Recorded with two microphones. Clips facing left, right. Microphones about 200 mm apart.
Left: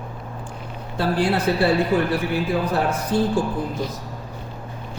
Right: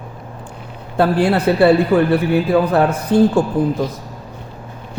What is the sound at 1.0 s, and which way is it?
A man's voice, 60° right (ahead or behind).